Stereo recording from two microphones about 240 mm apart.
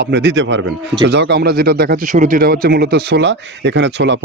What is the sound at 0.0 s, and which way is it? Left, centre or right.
Speech, right.